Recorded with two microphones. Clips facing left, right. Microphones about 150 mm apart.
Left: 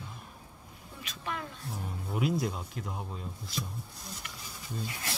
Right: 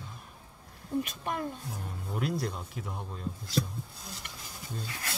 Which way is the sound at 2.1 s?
Centre (ahead or behind).